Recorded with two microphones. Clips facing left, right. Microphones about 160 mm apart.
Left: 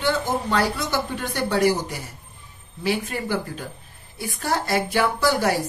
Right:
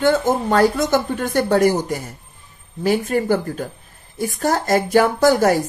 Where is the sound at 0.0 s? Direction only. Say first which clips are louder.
Right 7 dB; 50° right (ahead or behind).